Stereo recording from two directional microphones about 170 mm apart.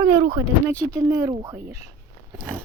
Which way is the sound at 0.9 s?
20° right (ahead or behind).